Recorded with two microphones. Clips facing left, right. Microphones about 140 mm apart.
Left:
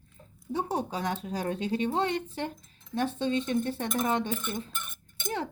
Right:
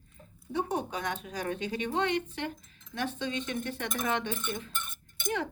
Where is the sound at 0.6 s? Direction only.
30° left (ahead or behind).